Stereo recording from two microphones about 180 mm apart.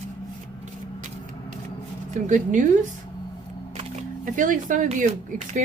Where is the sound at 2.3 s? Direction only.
45° right (ahead or behind).